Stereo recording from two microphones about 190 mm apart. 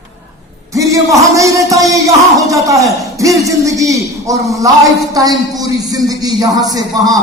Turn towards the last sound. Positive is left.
turn(degrees=-20)  # may be behind; listen again after turning